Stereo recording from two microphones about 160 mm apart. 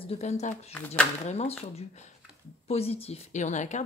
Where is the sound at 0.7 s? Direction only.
10° left (ahead or behind).